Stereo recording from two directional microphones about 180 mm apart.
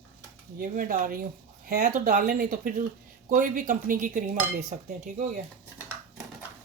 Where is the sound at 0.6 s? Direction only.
50° right (ahead or behind).